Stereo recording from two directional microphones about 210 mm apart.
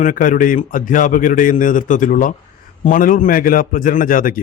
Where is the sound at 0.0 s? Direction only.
40° left (ahead or behind).